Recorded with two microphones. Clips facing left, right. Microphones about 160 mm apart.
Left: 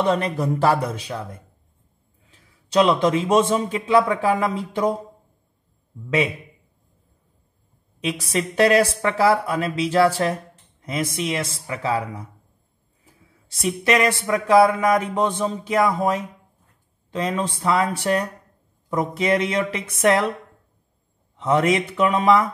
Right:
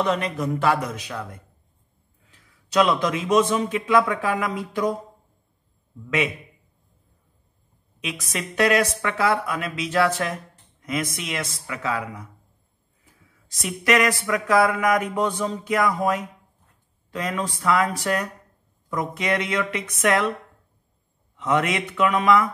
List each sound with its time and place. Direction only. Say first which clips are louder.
0.0 s speech: left 3 dB; 30° left (ahead or behind)
6.0 s speech: left 3 dB; 30° left (ahead or behind)
8.0 s speech: left 7 dB; 30° left (ahead or behind)
13.6 s speech: left 1 dB; 30° left (ahead or behind)
21.4 s speech: left 4 dB; 30° left (ahead or behind)